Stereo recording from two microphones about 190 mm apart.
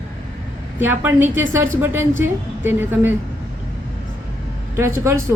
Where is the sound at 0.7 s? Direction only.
10° right (ahead or behind).